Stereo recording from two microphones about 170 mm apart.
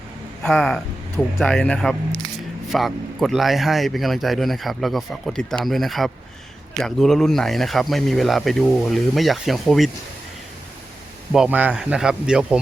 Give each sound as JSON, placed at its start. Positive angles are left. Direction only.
{"t": 0.4, "sound": "a man's voice", "side_deg": 0}
{"t": 11.3, "sound": "a man's voice", "side_deg": -5}